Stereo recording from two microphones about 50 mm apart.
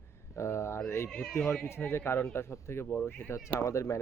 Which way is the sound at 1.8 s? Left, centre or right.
Left.